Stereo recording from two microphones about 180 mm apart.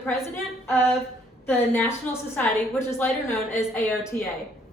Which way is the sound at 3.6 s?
15° left (ahead or behind).